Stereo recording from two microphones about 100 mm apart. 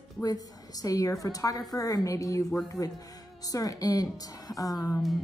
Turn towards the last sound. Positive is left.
turn(degrees=35)  # may be behind; listen again after turning